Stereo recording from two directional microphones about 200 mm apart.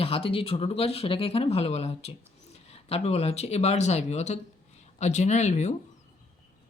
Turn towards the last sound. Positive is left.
turn(degrees=35)  # may be behind; listen again after turning